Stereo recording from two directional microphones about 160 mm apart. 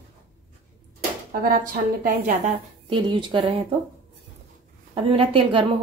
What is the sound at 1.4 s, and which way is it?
A woman's voice, 60° right (ahead or behind).